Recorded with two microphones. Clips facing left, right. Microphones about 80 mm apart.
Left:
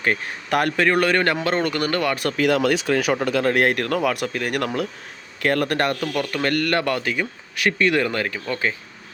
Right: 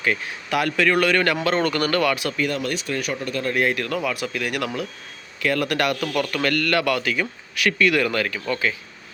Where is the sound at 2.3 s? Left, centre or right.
Left.